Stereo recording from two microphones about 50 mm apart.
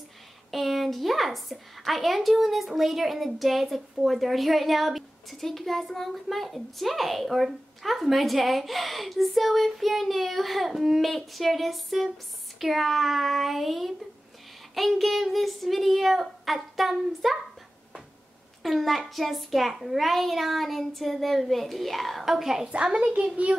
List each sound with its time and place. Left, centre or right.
0.5 s a woman's voice: centre
18.6 s a woman's voice: centre
22.9 s a child's voice: right